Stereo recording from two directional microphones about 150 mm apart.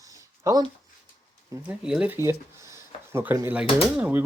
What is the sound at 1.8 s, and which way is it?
Speech, 5° right (ahead or behind).